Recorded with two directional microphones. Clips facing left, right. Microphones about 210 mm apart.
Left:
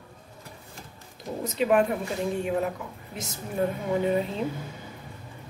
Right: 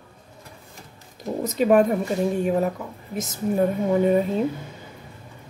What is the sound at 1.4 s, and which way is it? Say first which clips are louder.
Speech: right 5 dB; 40° right (ahead or behind).